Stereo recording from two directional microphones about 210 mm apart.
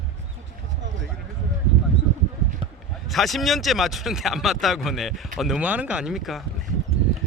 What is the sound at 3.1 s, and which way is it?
Speech, centre (ahead or behind).